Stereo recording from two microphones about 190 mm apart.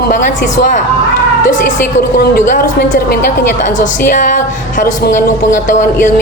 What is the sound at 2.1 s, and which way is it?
Speech, 50° left (ahead or behind).